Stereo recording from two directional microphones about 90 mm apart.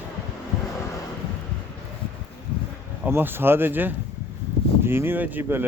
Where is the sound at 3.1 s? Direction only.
25° right (ahead or behind).